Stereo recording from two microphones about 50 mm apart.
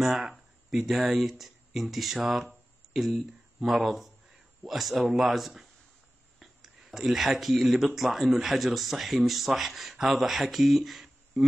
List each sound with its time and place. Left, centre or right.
0.0 s speech: centre